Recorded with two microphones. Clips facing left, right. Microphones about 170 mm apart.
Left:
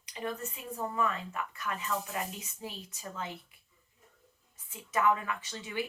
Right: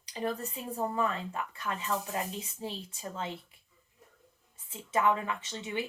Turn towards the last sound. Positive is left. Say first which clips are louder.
# right 1 dB
turn(degrees=-25)  # may be behind; listen again after turning